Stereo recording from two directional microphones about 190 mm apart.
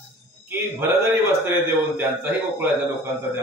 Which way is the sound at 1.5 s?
10° right (ahead or behind).